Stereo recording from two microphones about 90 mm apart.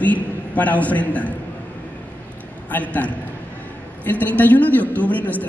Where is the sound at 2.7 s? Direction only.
15° left (ahead or behind).